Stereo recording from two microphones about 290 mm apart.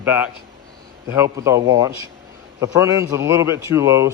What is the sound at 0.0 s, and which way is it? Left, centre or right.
Speech, centre.